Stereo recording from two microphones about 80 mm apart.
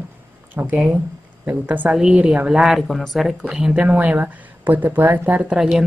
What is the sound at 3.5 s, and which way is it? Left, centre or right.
Speech, centre.